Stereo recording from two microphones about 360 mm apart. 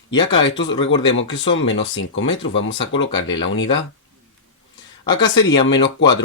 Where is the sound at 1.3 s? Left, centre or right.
Left.